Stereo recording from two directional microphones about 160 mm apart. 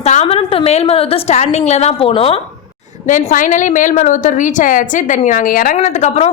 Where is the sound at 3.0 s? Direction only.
55° left (ahead or behind).